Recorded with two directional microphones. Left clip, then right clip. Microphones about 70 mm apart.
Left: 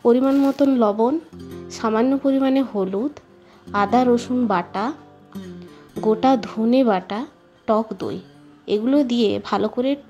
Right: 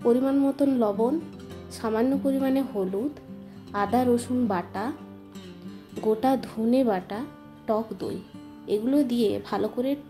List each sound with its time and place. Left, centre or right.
0.0 s a woman's voice: left
5.9 s a woman's voice: left